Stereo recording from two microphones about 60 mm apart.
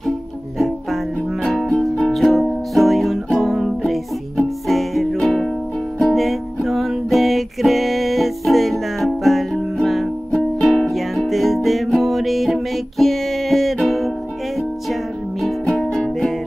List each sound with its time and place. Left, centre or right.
1.4 s music: centre
15.6 s music: centre